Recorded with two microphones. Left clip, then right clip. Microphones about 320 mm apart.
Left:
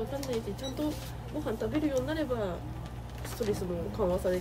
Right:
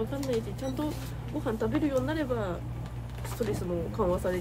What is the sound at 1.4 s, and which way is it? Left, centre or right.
Speech, centre.